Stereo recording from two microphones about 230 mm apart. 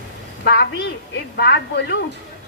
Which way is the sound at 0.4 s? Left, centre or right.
Left.